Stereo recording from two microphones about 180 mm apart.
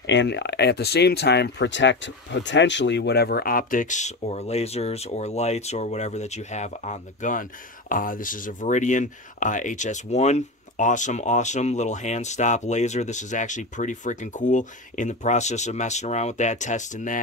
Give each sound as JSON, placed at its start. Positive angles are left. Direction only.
{"t": 0.0, "sound": "speech", "side_deg": 80}